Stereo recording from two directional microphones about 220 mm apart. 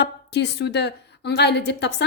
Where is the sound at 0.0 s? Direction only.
50° left (ahead or behind).